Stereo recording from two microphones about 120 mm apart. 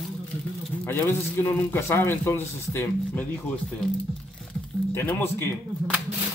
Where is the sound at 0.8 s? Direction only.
20° left (ahead or behind).